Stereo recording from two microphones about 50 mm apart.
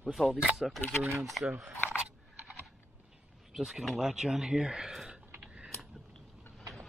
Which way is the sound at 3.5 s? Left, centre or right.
Centre.